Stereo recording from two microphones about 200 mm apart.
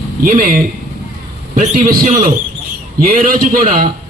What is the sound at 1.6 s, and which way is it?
A man's voice, 40° right (ahead or behind).